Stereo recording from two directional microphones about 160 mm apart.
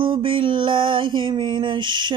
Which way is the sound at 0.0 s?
30° right (ahead or behind).